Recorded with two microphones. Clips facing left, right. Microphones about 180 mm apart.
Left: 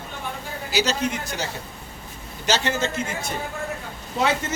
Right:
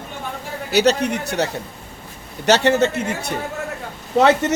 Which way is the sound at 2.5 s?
65° right (ahead or behind).